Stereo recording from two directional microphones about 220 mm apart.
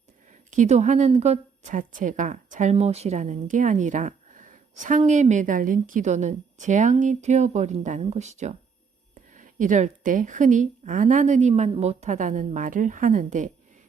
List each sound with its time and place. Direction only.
0.5 s a woman's voice: 30° right (ahead or behind)